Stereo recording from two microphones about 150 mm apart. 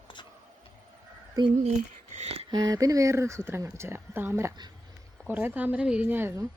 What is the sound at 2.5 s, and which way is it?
A woman's voice, 25° right (ahead or behind).